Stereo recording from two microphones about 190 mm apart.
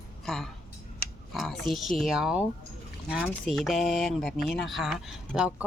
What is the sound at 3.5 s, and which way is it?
A woman's voice, centre (ahead or behind).